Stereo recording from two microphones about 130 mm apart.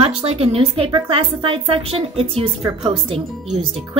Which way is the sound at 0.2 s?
50° right (ahead or behind).